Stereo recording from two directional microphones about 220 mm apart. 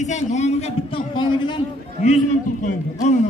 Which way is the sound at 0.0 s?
30° left (ahead or behind).